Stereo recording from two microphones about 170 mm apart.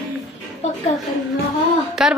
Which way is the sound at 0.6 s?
40° left (ahead or behind).